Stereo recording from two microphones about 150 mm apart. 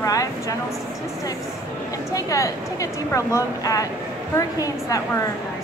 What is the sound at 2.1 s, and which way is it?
A woman's voice, 20° left (ahead or behind).